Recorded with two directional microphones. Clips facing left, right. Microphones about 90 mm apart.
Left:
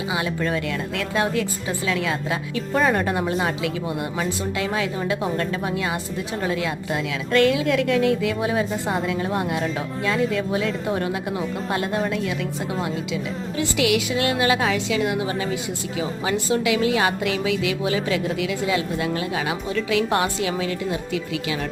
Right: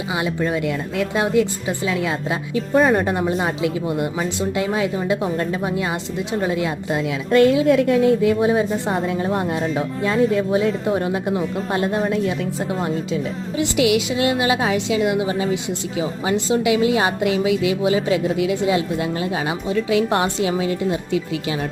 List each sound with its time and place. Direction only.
0.1 s a woman's voice: 20° right (ahead or behind)
2.7 s speech: 10° right (ahead or behind)
3.2 s a woman's voice: 20° right (ahead or behind)